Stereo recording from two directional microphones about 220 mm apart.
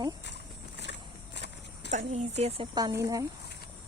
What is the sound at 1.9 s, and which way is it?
Speech, 30° right (ahead or behind).